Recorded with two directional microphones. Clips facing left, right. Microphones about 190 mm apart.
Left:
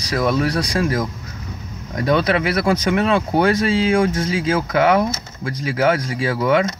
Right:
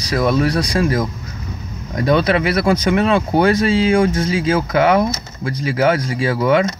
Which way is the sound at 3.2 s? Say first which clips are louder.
Right 2 dB; 15° right (ahead or behind).